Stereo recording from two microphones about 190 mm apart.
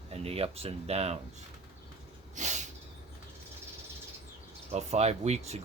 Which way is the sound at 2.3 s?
40° right (ahead or behind).